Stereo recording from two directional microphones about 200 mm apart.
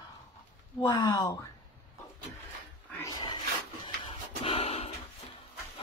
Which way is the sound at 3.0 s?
20° left (ahead or behind).